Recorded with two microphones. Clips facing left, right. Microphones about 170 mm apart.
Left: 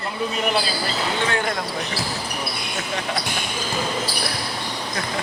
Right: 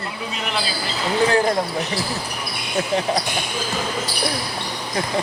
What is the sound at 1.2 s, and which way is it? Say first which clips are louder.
Speech: right 9 dB; 35° right (ahead or behind).